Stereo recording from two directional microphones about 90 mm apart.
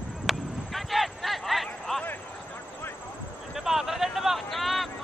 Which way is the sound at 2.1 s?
20° left (ahead or behind).